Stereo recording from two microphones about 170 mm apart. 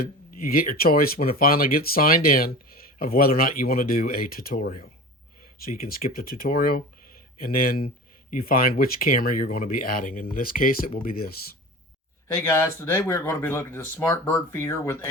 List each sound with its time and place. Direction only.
0.3 s speech: 60° left (ahead or behind)
12.3 s speech: 15° left (ahead or behind)